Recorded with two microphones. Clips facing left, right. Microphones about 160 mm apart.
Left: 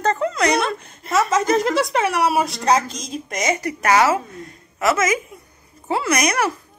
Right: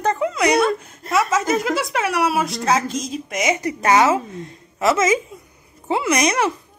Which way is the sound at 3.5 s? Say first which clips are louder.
Right 1 dB; 20° right (ahead or behind).